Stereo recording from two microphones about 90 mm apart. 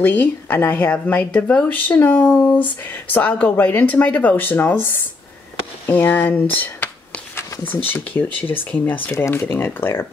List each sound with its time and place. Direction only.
0.0 s speech: 20° left (ahead or behind)
9.1 s speech: 30° left (ahead or behind)